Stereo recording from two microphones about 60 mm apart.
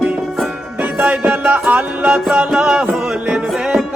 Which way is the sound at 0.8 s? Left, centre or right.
Right.